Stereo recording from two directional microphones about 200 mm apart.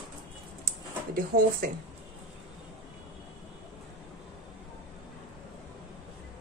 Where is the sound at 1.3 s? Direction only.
45° right (ahead or behind).